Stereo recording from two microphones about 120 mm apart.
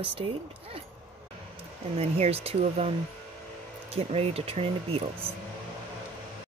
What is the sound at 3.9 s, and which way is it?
Speech, 60° right (ahead or behind).